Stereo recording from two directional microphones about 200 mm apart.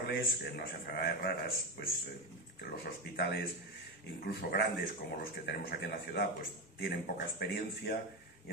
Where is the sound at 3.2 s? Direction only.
55° left (ahead or behind).